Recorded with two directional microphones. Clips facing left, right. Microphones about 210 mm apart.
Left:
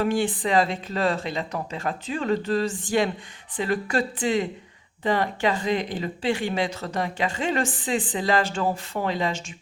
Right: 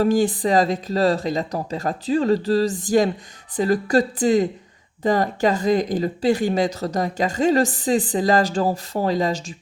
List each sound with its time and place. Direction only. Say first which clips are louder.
0.0 s speech: right 5 dB; 40° right (ahead or behind)